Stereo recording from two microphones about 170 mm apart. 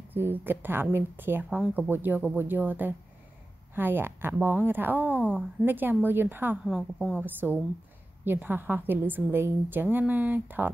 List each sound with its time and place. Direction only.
0.1 s a woman's voice: 10° right (ahead or behind)